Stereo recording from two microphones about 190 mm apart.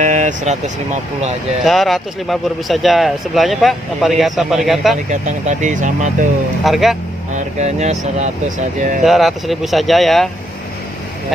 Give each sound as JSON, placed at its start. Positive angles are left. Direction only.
{"t": 0.0, "sound": "vehicle", "side_deg": -40}
{"t": 1.6, "sound": "speech", "side_deg": 0}
{"t": 5.1, "sound": "speech", "side_deg": -40}
{"t": 6.6, "sound": "speech", "side_deg": 0}
{"t": 7.3, "sound": "speech", "side_deg": -35}
{"t": 9.0, "sound": "speech", "side_deg": 0}